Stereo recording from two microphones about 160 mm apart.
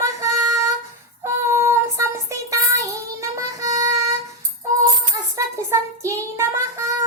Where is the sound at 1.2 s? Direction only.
15° right (ahead or behind).